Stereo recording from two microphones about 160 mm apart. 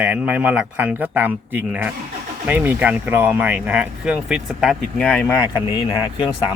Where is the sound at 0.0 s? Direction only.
10° right (ahead or behind); by 5.4 s 10° left (ahead or behind).